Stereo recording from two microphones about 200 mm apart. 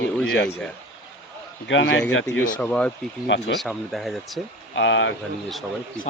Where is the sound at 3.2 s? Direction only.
60° left (ahead or behind).